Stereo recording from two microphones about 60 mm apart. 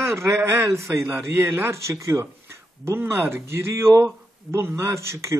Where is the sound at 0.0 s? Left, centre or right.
Right.